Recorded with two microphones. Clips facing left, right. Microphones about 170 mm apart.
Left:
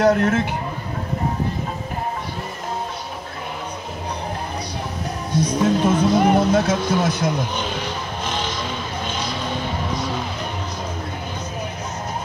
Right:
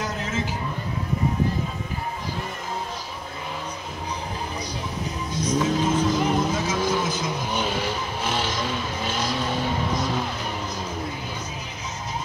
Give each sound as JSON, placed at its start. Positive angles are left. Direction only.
{"t": 0.0, "sound": "speech", "side_deg": 60}
{"t": 5.3, "sound": "music", "side_deg": 65}
{"t": 7.5, "sound": "music", "side_deg": -5}